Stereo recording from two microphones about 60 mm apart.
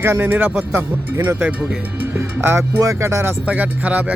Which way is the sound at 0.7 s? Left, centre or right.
Right.